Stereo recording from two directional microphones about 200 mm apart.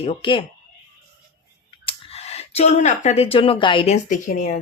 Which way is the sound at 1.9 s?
30° left (ahead or behind).